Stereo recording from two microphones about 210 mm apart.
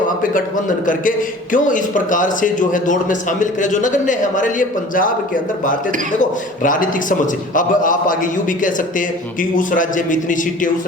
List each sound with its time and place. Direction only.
0.2 s a man's voice: 40° left (ahead or behind)